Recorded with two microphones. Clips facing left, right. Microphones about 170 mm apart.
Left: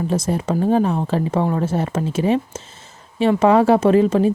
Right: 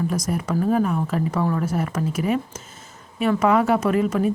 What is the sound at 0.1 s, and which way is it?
A woman's voice, 25° left (ahead or behind).